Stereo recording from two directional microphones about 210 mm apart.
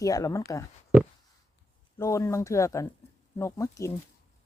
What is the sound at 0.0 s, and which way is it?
Speech, 15° left (ahead or behind).